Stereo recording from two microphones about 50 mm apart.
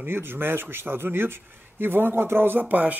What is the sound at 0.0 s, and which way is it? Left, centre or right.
Speech, right.